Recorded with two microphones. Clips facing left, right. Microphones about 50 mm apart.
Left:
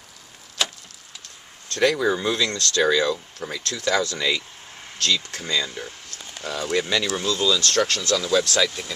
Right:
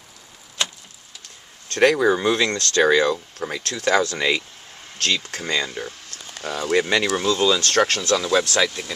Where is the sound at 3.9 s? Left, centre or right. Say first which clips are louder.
Right 3 dB; centre.